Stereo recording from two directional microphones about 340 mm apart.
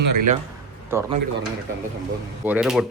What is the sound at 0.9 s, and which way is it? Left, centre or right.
Speech, centre.